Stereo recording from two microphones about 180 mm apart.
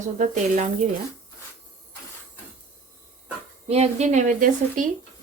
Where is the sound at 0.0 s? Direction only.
45° right (ahead or behind).